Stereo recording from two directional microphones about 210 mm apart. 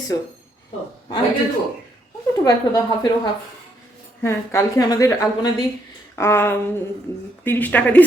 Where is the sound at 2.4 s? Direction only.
20° left (ahead or behind).